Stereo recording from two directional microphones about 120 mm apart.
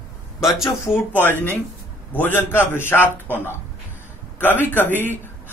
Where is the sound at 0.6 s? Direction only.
20° left (ahead or behind).